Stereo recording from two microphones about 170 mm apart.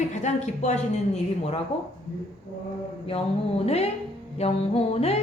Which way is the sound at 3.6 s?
35° left (ahead or behind).